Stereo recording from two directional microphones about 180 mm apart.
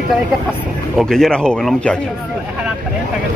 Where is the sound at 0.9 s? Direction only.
Centre (ahead or behind).